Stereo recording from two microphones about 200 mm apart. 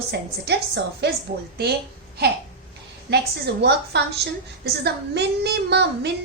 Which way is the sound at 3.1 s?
55° right (ahead or behind).